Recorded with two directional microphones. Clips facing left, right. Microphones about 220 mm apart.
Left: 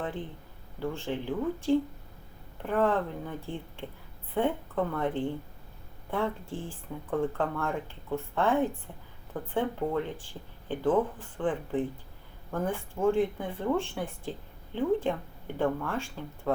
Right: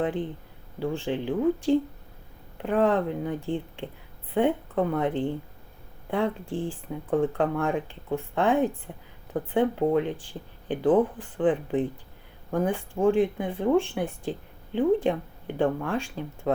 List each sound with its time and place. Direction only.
0.0 s speech: 15° right (ahead or behind)